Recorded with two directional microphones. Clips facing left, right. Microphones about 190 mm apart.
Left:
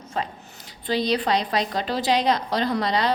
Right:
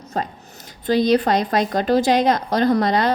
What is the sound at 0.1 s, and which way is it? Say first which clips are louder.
A woman's voice: right 3 dB; 45° right (ahead or behind).